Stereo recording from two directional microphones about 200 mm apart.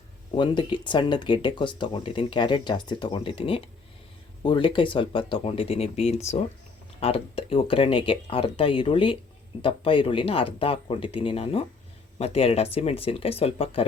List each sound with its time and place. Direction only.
0.3 s speech: 25° left (ahead or behind)